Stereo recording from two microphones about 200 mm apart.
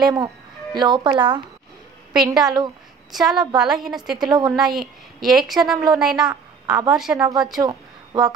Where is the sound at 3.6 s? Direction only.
Centre (ahead or behind).